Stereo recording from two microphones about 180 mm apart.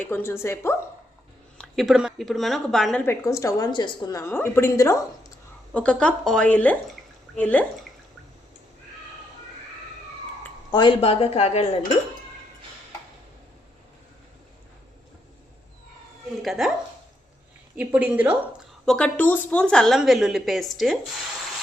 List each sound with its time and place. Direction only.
0.0 s a woman's voice: 15° left (ahead or behind)
1.5 s speech: centre (ahead or behind)
3.1 s a woman's voice: 15° left (ahead or behind)
5.7 s a woman's voice: 5° left (ahead or behind)
10.7 s speech: 25° left (ahead or behind)
16.4 s a woman's voice: centre (ahead or behind)
17.7 s a woman's voice: 5° right (ahead or behind)
18.9 s a woman's voice: 5° left (ahead or behind)